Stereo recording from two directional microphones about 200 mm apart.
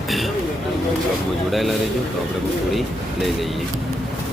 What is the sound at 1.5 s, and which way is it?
Speech, centre (ahead or behind).